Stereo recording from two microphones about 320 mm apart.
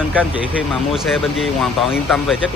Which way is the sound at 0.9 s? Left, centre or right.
Centre.